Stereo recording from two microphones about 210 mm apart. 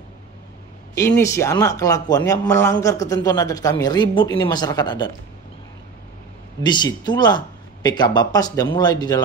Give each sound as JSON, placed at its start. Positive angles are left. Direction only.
{"t": 0.9, "sound": "a man's voice", "side_deg": 15}
{"t": 6.6, "sound": "speech", "side_deg": 20}